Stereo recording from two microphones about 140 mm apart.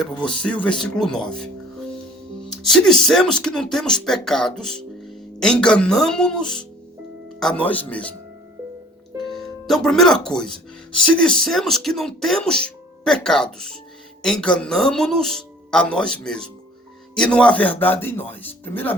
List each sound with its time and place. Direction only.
0.0 s speech: 5° left (ahead or behind)
2.5 s speech: 5° left (ahead or behind)
9.2 s speech: centre (ahead or behind)